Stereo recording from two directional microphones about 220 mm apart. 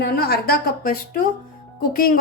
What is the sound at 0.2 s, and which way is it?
A woman's voice, 45° left (ahead or behind).